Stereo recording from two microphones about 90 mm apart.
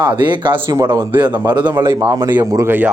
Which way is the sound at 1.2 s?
50° right (ahead or behind).